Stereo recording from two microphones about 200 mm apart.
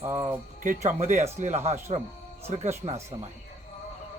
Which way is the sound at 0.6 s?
35° right (ahead or behind).